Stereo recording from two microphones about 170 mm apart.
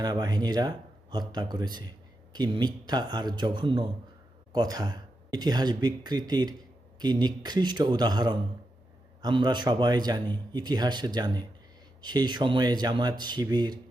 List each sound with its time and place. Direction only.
0.0 s a man's voice: 25° right (ahead or behind)